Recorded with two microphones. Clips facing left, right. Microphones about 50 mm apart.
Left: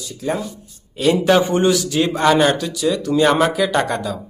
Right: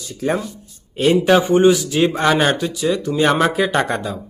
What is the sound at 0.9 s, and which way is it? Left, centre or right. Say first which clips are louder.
Speech: right 1 dB; right.